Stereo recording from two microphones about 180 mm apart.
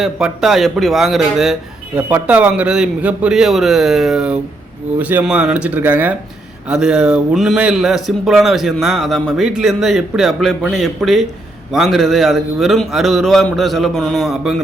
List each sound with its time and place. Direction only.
0.0 s speech: centre (ahead or behind)